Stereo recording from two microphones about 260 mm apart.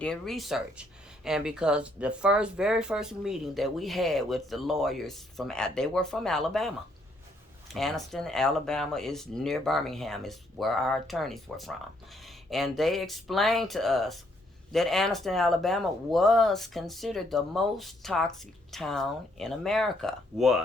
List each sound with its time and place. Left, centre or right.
0.0 s speech: centre